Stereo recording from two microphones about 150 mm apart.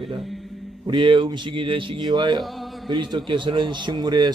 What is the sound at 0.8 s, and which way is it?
Speech, 30° right (ahead or behind).